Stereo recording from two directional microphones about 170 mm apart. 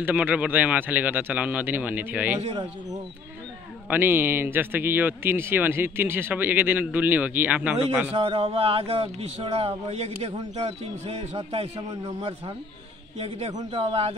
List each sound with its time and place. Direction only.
0.0 s a man's voice: 10° right (ahead or behind)
3.9 s a man's voice: 10° right (ahead or behind)
8.1 s speech: 35° right (ahead or behind)
11.9 s a man's voice: 25° right (ahead or behind)
13.2 s speech: 40° right (ahead or behind)